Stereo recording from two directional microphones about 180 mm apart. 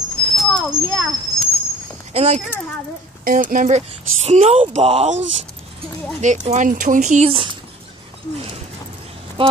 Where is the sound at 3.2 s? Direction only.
50° right (ahead or behind); by 5.1 s 35° right (ahead or behind).